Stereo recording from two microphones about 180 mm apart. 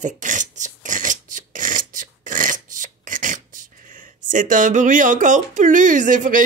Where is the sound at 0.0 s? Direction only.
45° right (ahead or behind).